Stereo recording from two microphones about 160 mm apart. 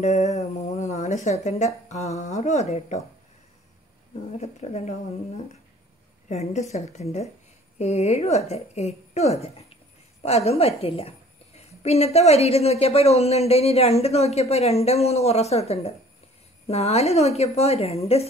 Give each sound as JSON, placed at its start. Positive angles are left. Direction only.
{"t": 0.0, "sound": "speech", "side_deg": 45}
{"t": 4.1, "sound": "speech", "side_deg": 45}
{"t": 6.2, "sound": "a woman's voice", "side_deg": 45}